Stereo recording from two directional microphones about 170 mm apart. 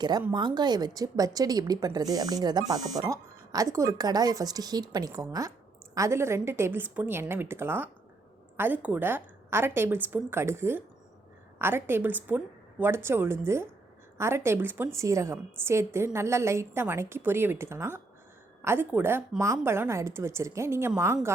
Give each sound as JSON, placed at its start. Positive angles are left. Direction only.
{"t": 0.3, "sound": "a woman's voice", "side_deg": -25}